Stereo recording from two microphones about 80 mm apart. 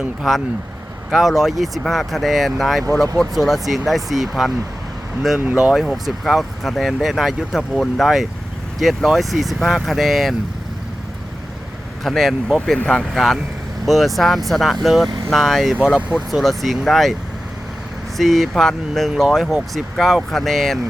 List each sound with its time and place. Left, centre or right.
0.2 s speech: centre
5.7 s speech: centre
12.0 s speech: centre
18.2 s speech: centre